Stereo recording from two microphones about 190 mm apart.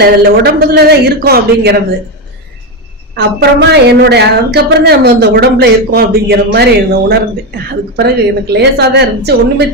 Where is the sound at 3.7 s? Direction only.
60° right (ahead or behind).